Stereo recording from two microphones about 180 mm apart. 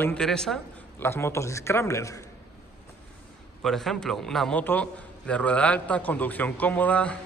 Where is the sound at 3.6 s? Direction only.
Centre (ahead or behind).